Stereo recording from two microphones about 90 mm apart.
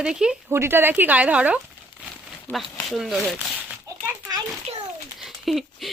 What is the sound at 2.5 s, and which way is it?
Speech, 20° left (ahead or behind).